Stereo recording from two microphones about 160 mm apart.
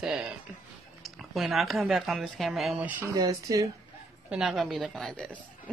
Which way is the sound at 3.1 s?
20° right (ahead or behind).